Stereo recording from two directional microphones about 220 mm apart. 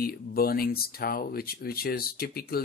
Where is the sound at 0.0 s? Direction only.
45° left (ahead or behind).